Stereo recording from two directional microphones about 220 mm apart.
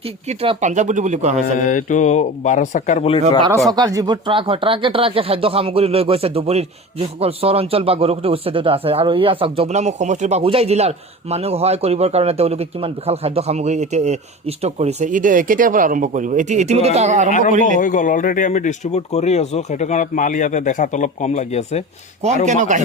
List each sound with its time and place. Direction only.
0.0 s speech: 30° right (ahead or behind)
1.5 s speech: 35° left (ahead or behind)
3.7 s speech: 15° right (ahead or behind); by 17.3 s 35° right (ahead or behind)
17.7 s speech: 35° left (ahead or behind)